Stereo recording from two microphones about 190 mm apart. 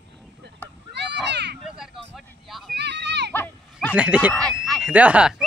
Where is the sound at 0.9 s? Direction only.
65° right (ahead or behind).